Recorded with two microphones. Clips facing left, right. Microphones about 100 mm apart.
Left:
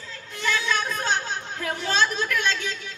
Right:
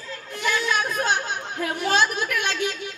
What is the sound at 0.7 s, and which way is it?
Chatter, 15° right (ahead or behind).